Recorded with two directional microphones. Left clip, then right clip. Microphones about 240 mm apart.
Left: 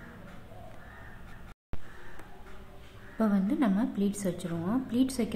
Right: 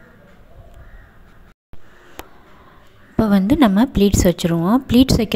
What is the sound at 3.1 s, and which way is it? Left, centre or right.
A woman's voice, right.